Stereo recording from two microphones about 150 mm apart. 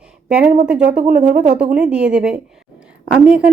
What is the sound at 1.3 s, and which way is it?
Speech, 55° right (ahead or behind).